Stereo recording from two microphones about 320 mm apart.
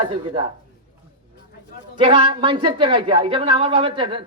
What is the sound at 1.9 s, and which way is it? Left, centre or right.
A woman's voice, centre.